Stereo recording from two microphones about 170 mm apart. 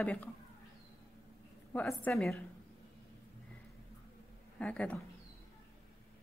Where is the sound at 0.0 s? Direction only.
10° left (ahead or behind).